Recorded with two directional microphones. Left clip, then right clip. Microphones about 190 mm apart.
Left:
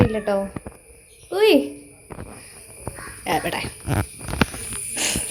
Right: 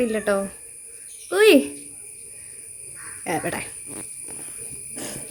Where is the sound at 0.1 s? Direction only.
50° right (ahead or behind).